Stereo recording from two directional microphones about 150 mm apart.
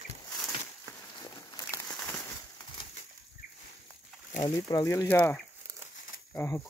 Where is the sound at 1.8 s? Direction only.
5° left (ahead or behind).